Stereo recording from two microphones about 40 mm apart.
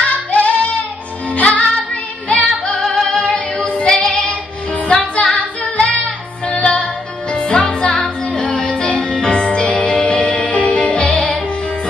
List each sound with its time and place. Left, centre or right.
0.0 s music: left
2.8 s music: centre
5.1 s female singing: left
6.4 s music: left